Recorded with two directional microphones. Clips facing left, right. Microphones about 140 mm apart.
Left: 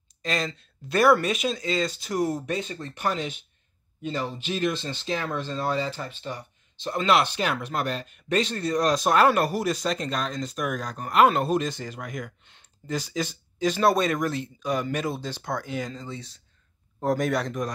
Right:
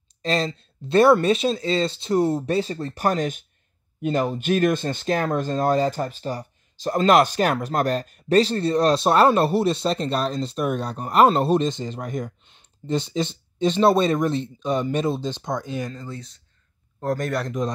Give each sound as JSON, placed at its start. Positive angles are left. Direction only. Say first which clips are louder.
{"t": 0.2, "sound": "speech", "louder": "right 5 dB", "side_deg": -30}
{"t": 11.7, "sound": "speech", "louder": "right 5 dB", "side_deg": -20}
{"t": 12.0, "sound": "speech", "louder": "right 6 dB", "side_deg": -35}
{"t": 12.4, "sound": "speech", "louder": "right 6 dB", "side_deg": -20}
{"t": 16.0, "sound": "speech", "louder": "right 2 dB", "side_deg": 0}